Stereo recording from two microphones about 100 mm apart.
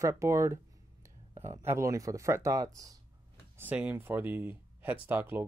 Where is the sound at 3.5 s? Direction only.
15° right (ahead or behind).